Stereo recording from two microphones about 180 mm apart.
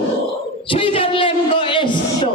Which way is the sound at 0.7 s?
30° left (ahead or behind).